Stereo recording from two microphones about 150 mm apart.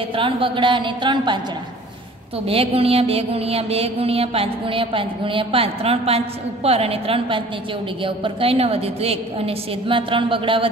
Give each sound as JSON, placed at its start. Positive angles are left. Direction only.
{"t": 0.1, "sound": "mantra", "side_deg": -35}
{"t": 2.4, "sound": "mantra", "side_deg": -40}